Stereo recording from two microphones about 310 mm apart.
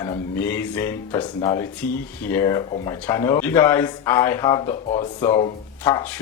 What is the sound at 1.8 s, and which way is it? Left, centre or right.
Speech, left.